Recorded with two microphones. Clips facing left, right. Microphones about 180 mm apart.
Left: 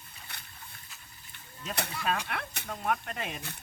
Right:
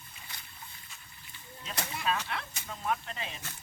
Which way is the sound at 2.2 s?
60° left (ahead or behind).